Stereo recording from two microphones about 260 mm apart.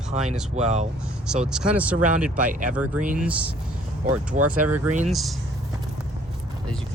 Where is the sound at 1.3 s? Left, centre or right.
Centre.